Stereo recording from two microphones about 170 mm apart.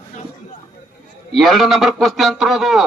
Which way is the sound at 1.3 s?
Centre (ahead or behind).